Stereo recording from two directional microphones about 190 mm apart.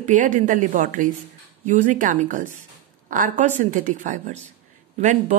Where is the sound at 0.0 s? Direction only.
40° right (ahead or behind).